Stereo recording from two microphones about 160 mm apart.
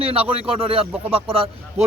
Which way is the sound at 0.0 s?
35° right (ahead or behind).